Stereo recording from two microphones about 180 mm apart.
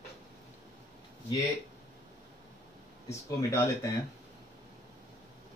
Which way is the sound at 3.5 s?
15° left (ahead or behind).